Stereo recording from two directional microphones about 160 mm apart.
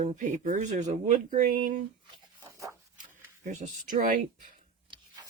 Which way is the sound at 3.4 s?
50° right (ahead or behind).